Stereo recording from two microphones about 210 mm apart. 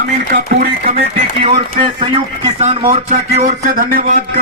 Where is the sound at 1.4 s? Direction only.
25° right (ahead or behind).